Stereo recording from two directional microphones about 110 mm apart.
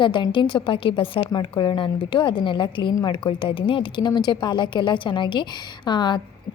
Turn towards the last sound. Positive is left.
turn(degrees=40)  # may be behind; listen again after turning